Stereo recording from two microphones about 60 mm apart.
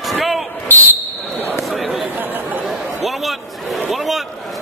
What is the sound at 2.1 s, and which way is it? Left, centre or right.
Chatter, right.